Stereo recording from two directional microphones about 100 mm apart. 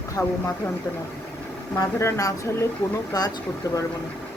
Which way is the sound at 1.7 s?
30° left (ahead or behind).